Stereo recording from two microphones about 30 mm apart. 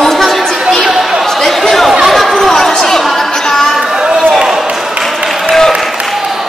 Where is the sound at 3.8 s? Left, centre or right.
Right.